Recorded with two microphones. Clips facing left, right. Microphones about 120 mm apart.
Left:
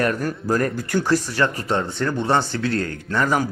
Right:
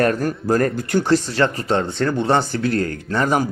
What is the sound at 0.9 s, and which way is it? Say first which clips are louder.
A man's voice: right 3 dB; 25° right (ahead or behind).